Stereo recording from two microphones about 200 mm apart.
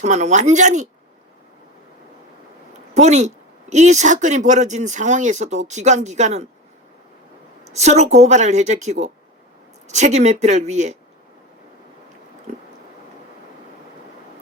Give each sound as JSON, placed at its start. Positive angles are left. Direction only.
{"t": 0.0, "sound": "speech", "side_deg": -35}
{"t": 2.9, "sound": "speech", "side_deg": -35}
{"t": 7.7, "sound": "speech", "side_deg": -35}